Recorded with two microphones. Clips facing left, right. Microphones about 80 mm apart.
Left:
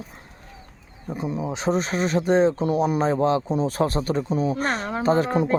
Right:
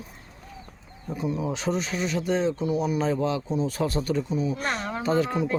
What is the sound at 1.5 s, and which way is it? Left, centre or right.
Speech, left.